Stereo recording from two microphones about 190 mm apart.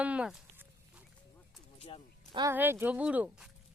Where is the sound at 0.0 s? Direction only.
5° right (ahead or behind).